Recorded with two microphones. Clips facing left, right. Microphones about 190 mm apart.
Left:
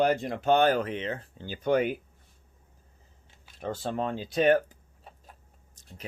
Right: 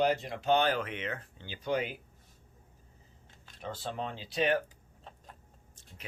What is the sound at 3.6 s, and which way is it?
Speech, 45° left (ahead or behind).